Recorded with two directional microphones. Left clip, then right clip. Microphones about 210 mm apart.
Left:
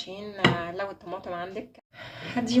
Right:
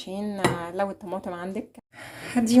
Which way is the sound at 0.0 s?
40° right (ahead or behind).